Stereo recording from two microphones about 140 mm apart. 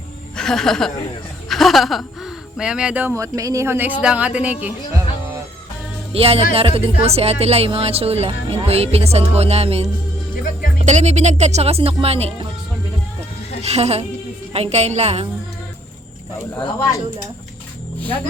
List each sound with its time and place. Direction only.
0.3 s speech: 5° left (ahead or behind)
3.2 s a woman's voice: 25° right (ahead or behind)
6.1 s speech: 45° right (ahead or behind)
13.6 s speech: 50° right (ahead or behind)
16.6 s speech: 30° left (ahead or behind)